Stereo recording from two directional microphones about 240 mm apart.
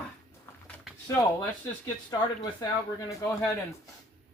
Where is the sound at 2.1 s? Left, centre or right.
Centre.